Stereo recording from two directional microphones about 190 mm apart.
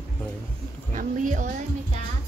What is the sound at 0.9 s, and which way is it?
Speech, 45° right (ahead or behind).